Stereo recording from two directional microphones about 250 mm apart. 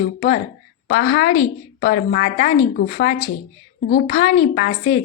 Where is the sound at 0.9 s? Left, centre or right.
Left.